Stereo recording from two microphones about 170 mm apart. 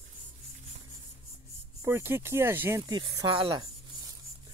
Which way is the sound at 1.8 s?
15° right (ahead or behind).